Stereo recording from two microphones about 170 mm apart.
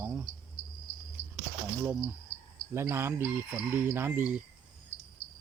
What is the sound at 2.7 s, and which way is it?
Fowl, 15° right (ahead or behind).